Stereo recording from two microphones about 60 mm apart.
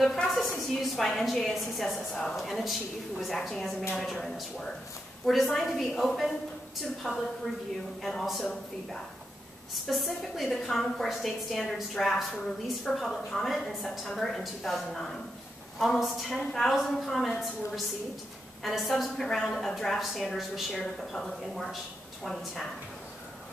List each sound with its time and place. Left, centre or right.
0.0 s a sound: centre
0.7 s a woman's voice: centre
2.0 s a woman's voice: centre
2.3 s a woman's voice: centre
9.8 s a woman's voice: centre